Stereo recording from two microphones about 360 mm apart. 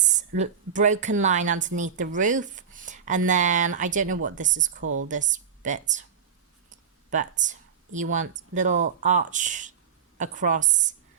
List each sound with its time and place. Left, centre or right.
0.0 s a woman's voice: centre
4.8 s speech: right
5.0 s speech: right
6.7 s a sound: right
8.1 s a woman's voice: right